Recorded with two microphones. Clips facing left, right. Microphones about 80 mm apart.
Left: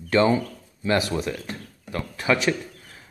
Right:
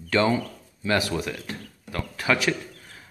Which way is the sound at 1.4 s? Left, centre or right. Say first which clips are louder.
Left 1 dB; centre.